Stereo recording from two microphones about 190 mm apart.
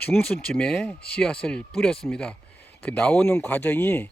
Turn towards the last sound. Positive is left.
turn(degrees=10)  # may be behind; listen again after turning